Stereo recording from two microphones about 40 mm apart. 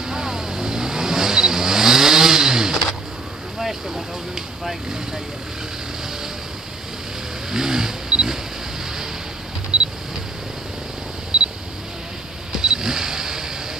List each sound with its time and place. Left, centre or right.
0.0 s vehicle: centre
7.5 s vehicle: centre
11.3 s camera: right
12.5 s vehicle: centre